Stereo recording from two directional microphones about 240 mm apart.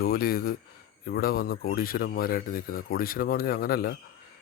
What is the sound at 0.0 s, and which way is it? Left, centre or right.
Speech, left.